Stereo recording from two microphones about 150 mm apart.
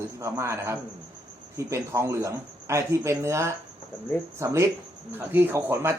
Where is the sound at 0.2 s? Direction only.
20° right (ahead or behind).